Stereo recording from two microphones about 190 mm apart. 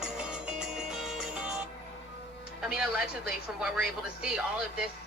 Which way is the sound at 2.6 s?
5° right (ahead or behind).